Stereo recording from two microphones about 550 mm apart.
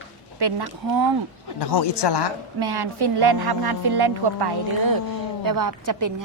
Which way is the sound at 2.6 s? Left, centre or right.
Right.